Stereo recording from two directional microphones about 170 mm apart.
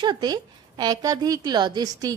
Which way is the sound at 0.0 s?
25° right (ahead or behind).